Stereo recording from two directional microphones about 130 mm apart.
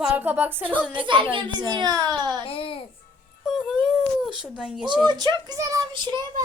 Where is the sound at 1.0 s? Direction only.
40° right (ahead or behind).